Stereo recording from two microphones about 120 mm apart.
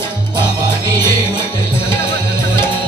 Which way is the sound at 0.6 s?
35° right (ahead or behind).